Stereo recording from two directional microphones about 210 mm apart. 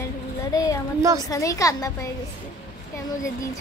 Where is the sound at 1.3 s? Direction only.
15° left (ahead or behind).